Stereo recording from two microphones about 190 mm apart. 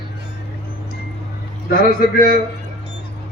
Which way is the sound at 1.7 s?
50° left (ahead or behind).